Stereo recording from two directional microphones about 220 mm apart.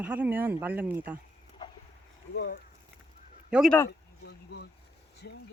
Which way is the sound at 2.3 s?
45° left (ahead or behind).